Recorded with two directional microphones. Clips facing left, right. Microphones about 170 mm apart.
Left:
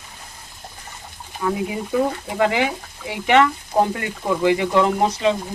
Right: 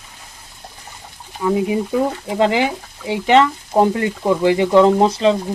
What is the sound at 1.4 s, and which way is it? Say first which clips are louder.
Speech: right 6 dB; 20° right (ahead or behind).